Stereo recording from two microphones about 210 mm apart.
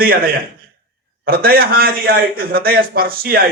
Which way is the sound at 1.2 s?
45° right (ahead or behind).